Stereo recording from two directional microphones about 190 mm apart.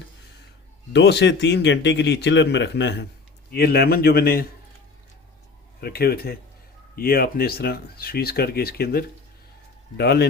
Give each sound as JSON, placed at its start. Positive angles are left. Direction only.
{"t": 0.9, "sound": "speech", "side_deg": 65}
{"t": 5.8, "sound": "speech", "side_deg": 55}